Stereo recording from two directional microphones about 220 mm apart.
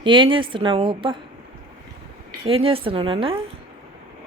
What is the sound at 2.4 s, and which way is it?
Speech, 25° right (ahead or behind).